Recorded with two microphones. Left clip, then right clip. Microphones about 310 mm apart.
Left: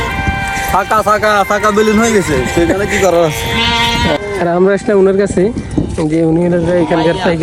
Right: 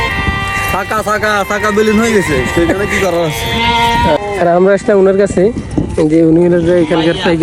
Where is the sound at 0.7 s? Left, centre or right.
Centre.